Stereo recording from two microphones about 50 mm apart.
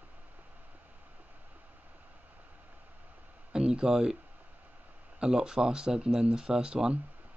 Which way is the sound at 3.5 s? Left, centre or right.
Centre.